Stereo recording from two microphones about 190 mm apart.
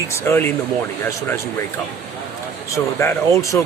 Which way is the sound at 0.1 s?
15° left (ahead or behind).